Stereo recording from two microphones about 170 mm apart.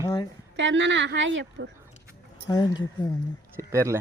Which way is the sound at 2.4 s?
25° left (ahead or behind).